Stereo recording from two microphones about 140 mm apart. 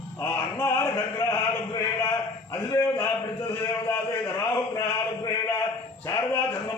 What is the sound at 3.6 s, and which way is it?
Speech, 15° left (ahead or behind).